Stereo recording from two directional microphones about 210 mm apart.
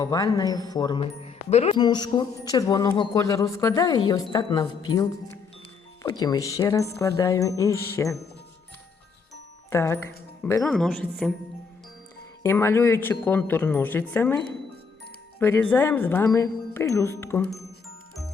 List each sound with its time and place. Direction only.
0.0 s speech: 15° left (ahead or behind)
9.6 s speech: 10° left (ahead or behind)
12.4 s speech: 10° left (ahead or behind)
15.4 s speech: 10° left (ahead or behind)